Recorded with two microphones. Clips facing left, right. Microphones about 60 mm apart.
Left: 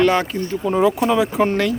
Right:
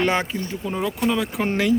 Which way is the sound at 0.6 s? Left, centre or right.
Centre.